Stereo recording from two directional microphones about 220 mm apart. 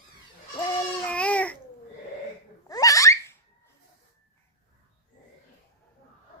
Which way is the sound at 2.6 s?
15° left (ahead or behind).